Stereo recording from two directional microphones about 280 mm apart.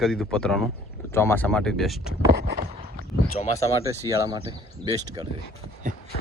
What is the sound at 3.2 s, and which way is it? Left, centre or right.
Speech, left.